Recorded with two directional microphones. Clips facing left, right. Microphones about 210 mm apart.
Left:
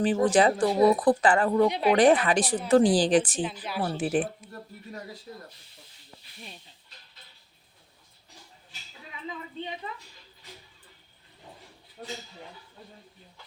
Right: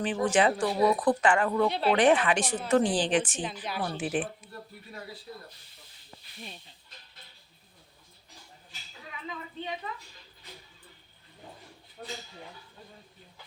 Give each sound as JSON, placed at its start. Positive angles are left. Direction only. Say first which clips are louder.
{"t": 0.0, "sound": "speech", "louder": "left 4 dB", "side_deg": 35}
{"t": 1.6, "sound": "speech", "louder": "left 3 dB", "side_deg": 15}
{"t": 1.9, "sound": "speech", "louder": "left 2 dB", "side_deg": 35}
{"t": 3.6, "sound": "speech", "louder": "left 3 dB", "side_deg": 5}
{"t": 3.9, "sound": "speech", "louder": "left 5 dB", "side_deg": 40}